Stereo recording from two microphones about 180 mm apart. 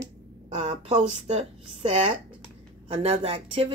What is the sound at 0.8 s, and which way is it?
Speech, 35° right (ahead or behind).